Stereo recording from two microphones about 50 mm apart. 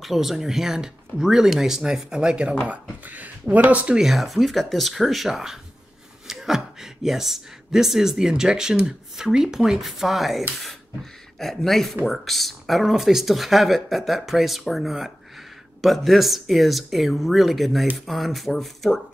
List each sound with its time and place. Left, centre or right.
0.0 s speech: centre
2.7 s speech: right
3.9 s speech: centre